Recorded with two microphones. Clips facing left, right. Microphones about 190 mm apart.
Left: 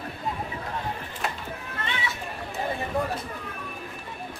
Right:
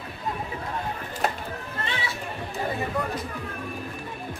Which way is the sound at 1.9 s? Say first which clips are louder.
Left 1 dB; 30° right (ahead or behind).